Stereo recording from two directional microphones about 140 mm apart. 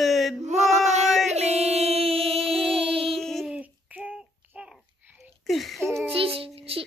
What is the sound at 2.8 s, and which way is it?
Child singing, 40° right (ahead or behind).